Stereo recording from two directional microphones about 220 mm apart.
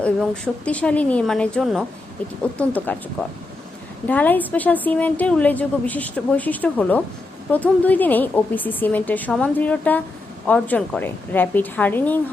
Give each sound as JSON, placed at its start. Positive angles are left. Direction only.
{"t": 0.0, "sound": "a woman's voice", "side_deg": 5}